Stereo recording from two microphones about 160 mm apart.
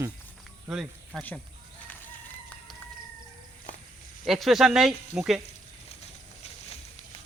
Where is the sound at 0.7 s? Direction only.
Centre (ahead or behind).